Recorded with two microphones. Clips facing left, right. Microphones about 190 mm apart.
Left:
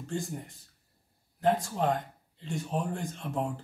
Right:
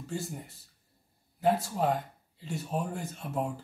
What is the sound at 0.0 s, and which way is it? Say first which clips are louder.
Speech: left 2 dB; 5° right (ahead or behind).